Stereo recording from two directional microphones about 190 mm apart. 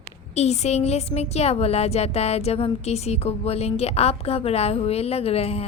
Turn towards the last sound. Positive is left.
turn(degrees=30)  # may be behind; listen again after turning